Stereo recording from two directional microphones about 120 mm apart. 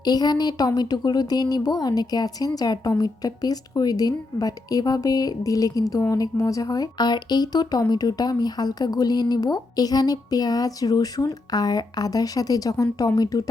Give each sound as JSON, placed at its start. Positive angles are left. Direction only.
{"t": 0.0, "sound": "a woman's voice", "side_deg": 35}